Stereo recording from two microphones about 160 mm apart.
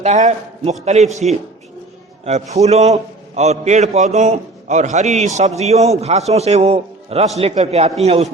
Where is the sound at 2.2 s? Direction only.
45° right (ahead or behind).